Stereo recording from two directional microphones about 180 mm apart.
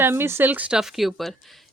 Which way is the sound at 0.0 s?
15° right (ahead or behind).